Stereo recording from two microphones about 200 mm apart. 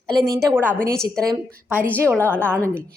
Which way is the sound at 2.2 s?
10° left (ahead or behind).